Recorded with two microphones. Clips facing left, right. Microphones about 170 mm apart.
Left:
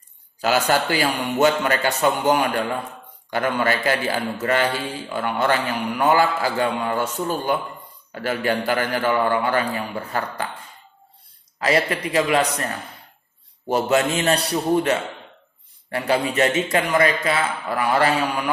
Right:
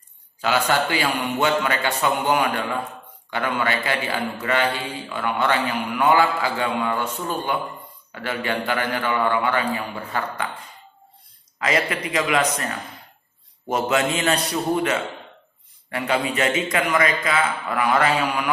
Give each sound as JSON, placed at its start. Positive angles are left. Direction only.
{"t": 0.4, "sound": "a man's voice", "side_deg": 40}
{"t": 11.6, "sound": "a man's voice", "side_deg": 35}
{"t": 13.7, "sound": "a man's voice", "side_deg": 35}